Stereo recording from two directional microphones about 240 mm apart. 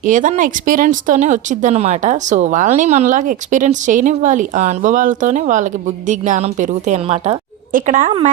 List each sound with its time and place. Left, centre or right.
0.0 s speech: right